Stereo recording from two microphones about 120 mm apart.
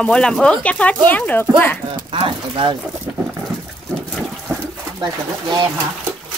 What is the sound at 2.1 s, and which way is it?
Speech, 45° right (ahead or behind).